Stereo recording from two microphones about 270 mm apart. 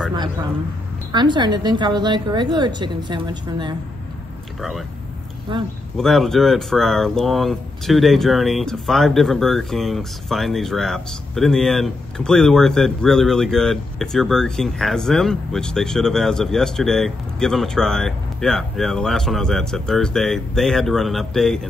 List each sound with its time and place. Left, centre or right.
1.1 s a woman's voice: centre
4.6 s speech: centre
5.9 s speech: centre